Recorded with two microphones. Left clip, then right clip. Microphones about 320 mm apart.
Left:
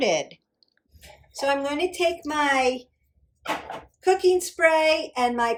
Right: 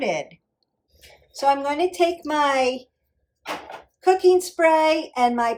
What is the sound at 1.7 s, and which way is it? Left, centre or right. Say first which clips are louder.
Speech: right 3 dB; centre.